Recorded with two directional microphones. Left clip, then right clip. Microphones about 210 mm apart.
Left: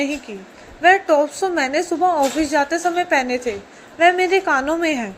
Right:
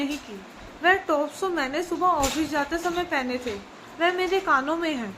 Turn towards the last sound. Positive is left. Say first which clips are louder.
# left 7 dB
turn(degrees=20)  # may be behind; listen again after turning